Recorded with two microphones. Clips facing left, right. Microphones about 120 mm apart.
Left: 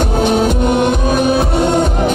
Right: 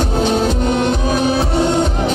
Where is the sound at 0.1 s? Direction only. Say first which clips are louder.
Left 3 dB; 55° left (ahead or behind).